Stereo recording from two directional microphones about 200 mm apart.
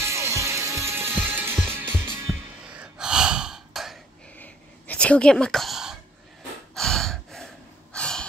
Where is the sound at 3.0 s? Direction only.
5° right (ahead or behind).